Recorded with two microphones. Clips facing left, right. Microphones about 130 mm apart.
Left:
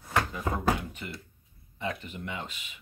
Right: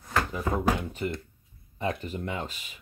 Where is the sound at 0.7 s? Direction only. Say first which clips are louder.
Right 7 dB; 35° right (ahead or behind).